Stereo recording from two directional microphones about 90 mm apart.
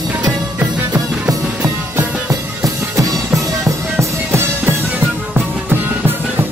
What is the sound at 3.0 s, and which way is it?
Music, 35° right (ahead or behind).